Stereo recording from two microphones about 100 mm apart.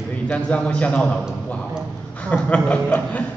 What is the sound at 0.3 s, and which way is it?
Speech, 15° left (ahead or behind).